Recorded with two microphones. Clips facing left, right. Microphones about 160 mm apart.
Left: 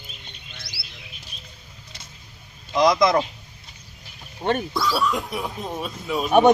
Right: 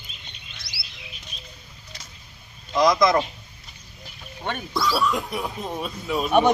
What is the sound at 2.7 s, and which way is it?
Speech, centre (ahead or behind).